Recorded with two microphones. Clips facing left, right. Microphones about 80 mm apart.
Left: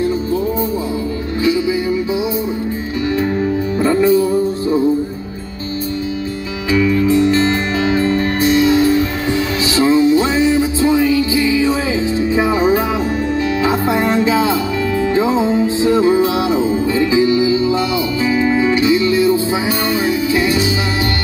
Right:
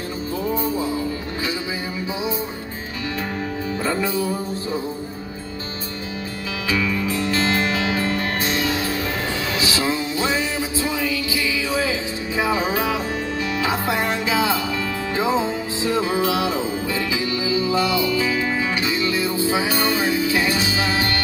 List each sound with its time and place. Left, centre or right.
3.8 s music: left
6.8 s music: left
20.3 s music: right